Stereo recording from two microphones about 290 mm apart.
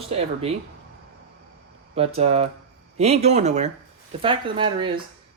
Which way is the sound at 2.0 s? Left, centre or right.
Right.